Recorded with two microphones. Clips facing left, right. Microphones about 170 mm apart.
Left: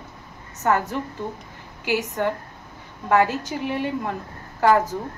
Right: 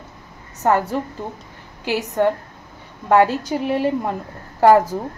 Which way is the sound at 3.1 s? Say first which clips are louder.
Right 4 dB; 35° right (ahead or behind).